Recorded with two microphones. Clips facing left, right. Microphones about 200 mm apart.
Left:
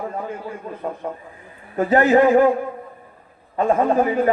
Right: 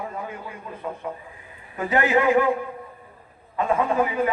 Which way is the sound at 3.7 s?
40° left (ahead or behind).